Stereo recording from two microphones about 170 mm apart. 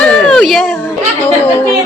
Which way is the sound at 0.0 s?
5° left (ahead or behind).